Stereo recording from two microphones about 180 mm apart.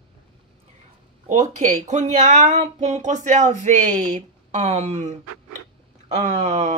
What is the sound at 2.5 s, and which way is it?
Speech, 35° right (ahead or behind).